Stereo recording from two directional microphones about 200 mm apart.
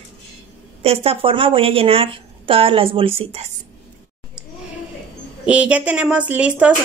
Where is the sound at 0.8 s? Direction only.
30° right (ahead or behind).